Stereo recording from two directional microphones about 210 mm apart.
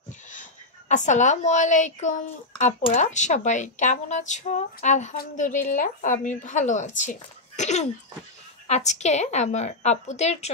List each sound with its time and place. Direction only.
0.3 s a woman's voice: 35° left (ahead or behind)